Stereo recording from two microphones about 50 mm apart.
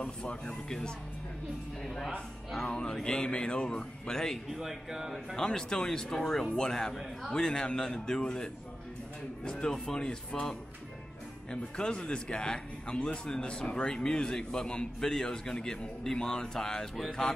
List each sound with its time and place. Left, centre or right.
0.0 s speech: centre
2.7 s speech: centre
4.5 s speech: centre
5.3 s speech: centre
11.5 s speech: centre